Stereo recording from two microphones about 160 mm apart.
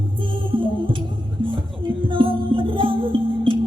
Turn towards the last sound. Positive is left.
turn(degrees=-30)  # may be behind; listen again after turning